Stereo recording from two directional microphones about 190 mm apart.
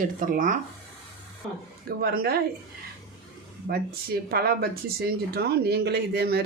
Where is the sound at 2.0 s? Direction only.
55° right (ahead or behind).